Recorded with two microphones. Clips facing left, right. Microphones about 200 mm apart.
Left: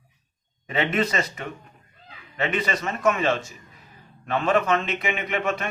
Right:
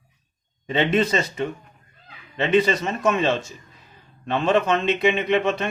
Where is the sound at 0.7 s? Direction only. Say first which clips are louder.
Right 4 dB; 25° right (ahead or behind).